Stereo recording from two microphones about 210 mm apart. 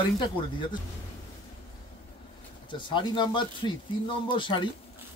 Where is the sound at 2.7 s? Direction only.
25° left (ahead or behind).